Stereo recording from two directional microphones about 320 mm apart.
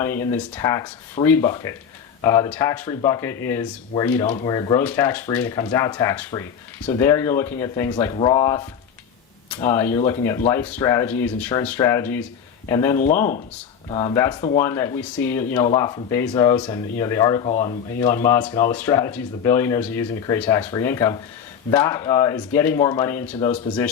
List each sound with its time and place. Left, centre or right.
0.0 s speech: centre
18.0 s speech: centre